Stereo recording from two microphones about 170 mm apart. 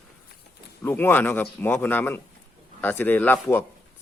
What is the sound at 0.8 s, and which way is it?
A man's voice, 10° left (ahead or behind).